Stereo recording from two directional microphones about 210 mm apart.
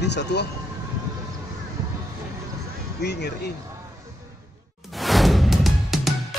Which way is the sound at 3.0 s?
50° left (ahead or behind).